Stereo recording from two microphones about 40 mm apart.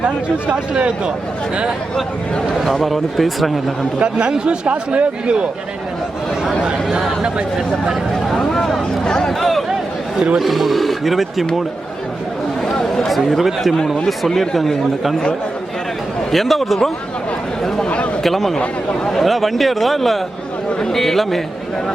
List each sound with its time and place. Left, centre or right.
0.8 s speech: right
2.6 s speech: centre
4.0 s speech: right
8.3 s speech: centre
9.4 s a sound: centre
10.3 s speech: centre
12.6 s chatter: centre
13.1 s speech: centre
16.3 s speech: centre
17.8 s a man's voice: left
18.2 s speech: centre